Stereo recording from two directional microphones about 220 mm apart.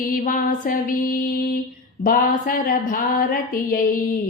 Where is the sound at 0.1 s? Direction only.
40° left (ahead or behind).